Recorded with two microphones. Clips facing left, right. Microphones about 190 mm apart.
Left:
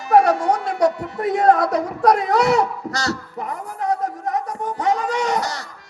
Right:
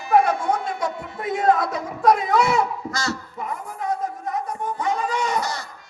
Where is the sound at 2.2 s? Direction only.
40° left (ahead or behind).